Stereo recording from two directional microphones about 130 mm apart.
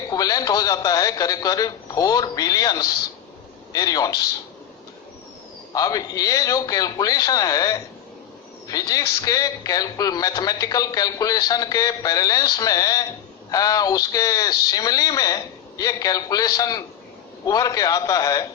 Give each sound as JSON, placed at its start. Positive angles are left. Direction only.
{"t": 0.1, "sound": "a man's voice", "side_deg": 30}
{"t": 5.7, "sound": "a man's voice", "side_deg": 30}